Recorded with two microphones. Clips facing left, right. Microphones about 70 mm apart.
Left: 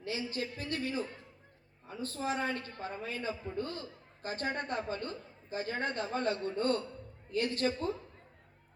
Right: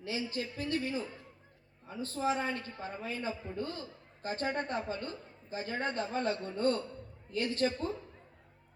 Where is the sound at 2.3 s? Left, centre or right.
Left.